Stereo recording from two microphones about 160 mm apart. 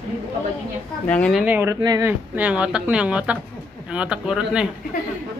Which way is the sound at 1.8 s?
25° right (ahead or behind).